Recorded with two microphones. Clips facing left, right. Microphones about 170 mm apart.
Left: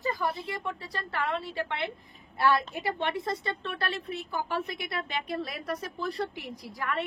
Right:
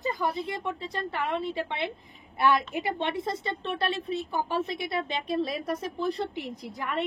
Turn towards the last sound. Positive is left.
turn(degrees=-20)  # may be behind; listen again after turning